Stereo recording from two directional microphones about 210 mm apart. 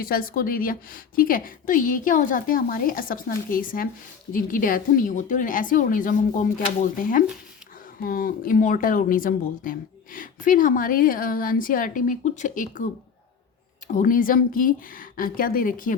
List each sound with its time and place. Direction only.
0.0 s speech: 45° left (ahead or behind)